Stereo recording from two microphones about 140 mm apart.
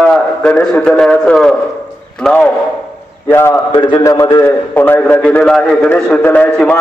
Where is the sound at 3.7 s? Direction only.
30° left (ahead or behind).